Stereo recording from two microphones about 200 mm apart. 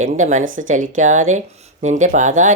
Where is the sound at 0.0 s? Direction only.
40° right (ahead or behind).